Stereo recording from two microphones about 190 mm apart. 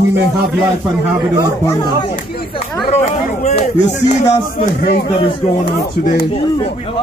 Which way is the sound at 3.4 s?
35° left (ahead or behind).